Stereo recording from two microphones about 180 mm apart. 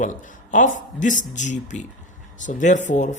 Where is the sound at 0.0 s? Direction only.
45° left (ahead or behind).